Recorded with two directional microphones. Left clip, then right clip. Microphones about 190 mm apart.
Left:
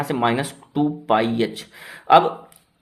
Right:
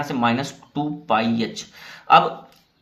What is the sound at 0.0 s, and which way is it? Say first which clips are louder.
Speech: left 1 dB; 45° left (ahead or behind).